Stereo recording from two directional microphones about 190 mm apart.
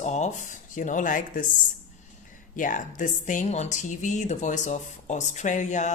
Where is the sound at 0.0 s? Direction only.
40° left (ahead or behind).